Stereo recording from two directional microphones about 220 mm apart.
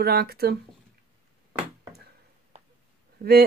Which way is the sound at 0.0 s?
45° right (ahead or behind).